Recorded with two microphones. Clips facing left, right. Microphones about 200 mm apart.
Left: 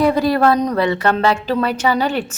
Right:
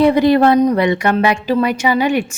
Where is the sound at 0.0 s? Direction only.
20° right (ahead or behind).